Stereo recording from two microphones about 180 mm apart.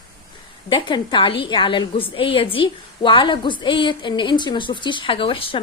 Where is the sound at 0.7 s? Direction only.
25° left (ahead or behind).